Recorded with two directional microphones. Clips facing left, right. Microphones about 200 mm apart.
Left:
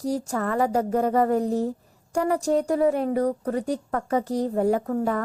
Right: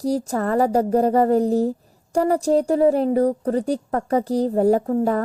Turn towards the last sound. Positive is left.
turn(degrees=-30)  # may be behind; listen again after turning